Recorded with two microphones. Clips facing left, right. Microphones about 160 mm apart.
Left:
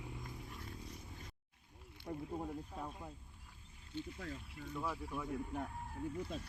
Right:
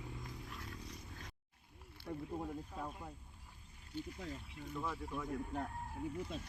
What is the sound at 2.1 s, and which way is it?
Speech, 30° left (ahead or behind).